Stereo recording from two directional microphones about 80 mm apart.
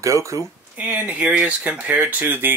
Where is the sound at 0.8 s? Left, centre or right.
Centre.